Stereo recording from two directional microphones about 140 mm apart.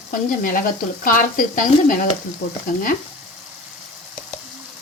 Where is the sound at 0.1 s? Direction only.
75° left (ahead or behind).